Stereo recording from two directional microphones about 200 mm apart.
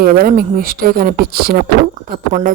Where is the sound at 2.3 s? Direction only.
35° right (ahead or behind).